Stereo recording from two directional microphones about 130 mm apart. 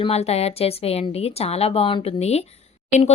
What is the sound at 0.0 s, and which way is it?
A woman's voice, 55° left (ahead or behind).